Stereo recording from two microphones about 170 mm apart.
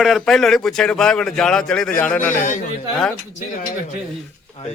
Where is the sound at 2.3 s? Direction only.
50° left (ahead or behind).